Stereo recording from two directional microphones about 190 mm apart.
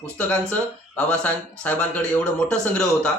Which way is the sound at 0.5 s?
5° left (ahead or behind).